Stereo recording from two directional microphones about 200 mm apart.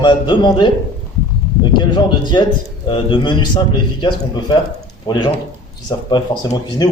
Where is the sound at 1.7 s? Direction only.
20° left (ahead or behind).